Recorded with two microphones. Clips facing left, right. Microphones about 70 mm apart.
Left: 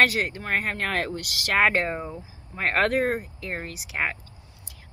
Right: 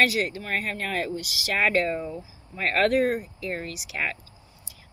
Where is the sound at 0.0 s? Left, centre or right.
Left.